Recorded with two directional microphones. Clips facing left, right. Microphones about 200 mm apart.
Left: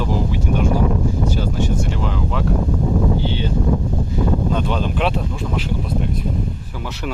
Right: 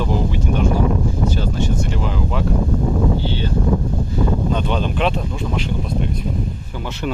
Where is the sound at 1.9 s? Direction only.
5° right (ahead or behind).